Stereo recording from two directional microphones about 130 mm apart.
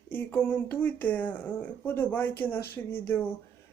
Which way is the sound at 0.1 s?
15° left (ahead or behind).